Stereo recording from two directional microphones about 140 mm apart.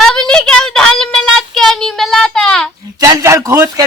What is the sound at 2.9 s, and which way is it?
Speech, 25° right (ahead or behind).